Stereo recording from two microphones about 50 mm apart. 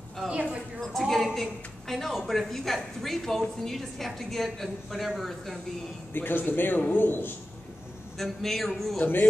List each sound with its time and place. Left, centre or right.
0.3 s a woman's voice: right
0.7 s a woman's voice: centre
6.1 s a man's voice: left
8.2 s a woman's voice: centre
8.9 s speech: left